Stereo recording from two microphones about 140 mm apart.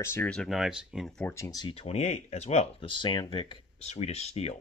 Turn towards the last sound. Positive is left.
turn(degrees=45)  # may be behind; listen again after turning